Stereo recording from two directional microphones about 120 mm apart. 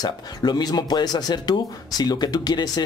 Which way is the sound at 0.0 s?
35° left (ahead or behind).